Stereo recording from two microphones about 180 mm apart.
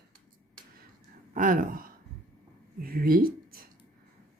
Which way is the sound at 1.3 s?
50° right (ahead or behind).